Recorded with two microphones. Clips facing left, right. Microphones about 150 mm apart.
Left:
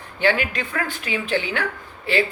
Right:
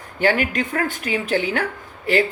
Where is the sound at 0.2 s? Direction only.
45° right (ahead or behind).